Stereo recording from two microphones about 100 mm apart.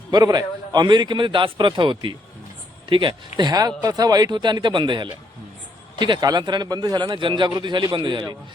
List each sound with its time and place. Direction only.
0.1 s speech: 40° right (ahead or behind)